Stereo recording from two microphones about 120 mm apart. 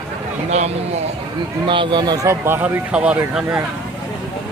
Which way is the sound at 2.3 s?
20° right (ahead or behind).